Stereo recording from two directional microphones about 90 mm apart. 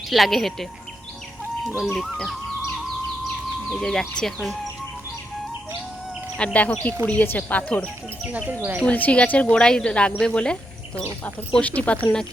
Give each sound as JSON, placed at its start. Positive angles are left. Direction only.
{"t": 0.1, "sound": "speech", "side_deg": 0}
{"t": 1.9, "sound": "speech", "side_deg": 5}
{"t": 3.7, "sound": "speech", "side_deg": 5}
{"t": 6.3, "sound": "speech", "side_deg": 15}
{"t": 8.2, "sound": "speech", "side_deg": -15}
{"t": 8.8, "sound": "speech", "side_deg": 15}